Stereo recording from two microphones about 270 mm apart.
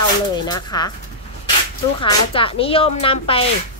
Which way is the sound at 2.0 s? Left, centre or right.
Centre.